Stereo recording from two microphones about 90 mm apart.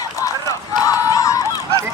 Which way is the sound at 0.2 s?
35° left (ahead or behind).